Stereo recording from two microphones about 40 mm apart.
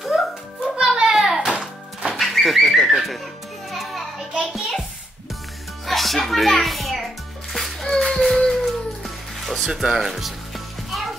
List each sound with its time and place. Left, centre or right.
0.1 s music: centre
2.1 s bird: centre
3.7 s children playing: centre
4.5 s music: centre
5.9 s music: centre
9.7 s speech: centre
9.9 s music: centre